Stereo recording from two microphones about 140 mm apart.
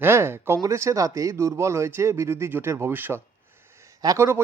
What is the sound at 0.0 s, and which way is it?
Speech, 15° right (ahead or behind).